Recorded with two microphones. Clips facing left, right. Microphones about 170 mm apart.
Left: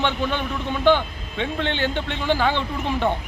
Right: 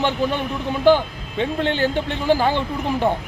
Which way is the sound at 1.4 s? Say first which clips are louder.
Right 4 dB; 40° right (ahead or behind).